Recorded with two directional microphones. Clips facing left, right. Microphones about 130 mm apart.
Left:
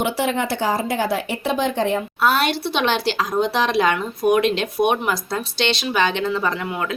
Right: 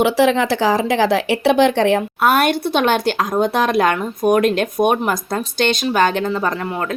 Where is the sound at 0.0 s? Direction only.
90° right.